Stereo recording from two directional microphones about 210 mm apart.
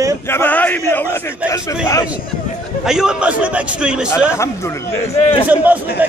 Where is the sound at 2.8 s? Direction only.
Centre (ahead or behind).